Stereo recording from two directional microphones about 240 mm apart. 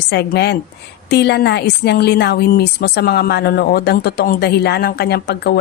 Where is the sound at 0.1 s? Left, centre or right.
Left.